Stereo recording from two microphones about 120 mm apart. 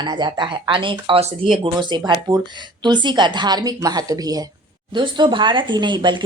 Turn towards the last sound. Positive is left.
turn(degrees=-40)  # may be behind; listen again after turning